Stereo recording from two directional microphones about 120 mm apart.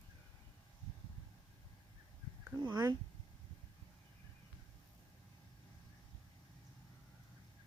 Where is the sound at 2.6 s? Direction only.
35° right (ahead or behind).